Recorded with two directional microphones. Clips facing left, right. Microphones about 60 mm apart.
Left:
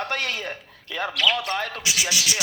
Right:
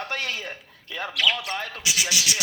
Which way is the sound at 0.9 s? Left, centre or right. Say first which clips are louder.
Left 2 dB; left.